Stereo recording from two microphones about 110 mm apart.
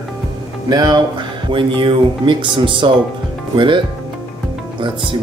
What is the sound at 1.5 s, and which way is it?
Speech, 50° right (ahead or behind).